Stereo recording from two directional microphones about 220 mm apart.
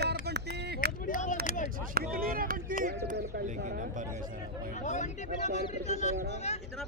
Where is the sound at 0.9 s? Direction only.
40° left (ahead or behind).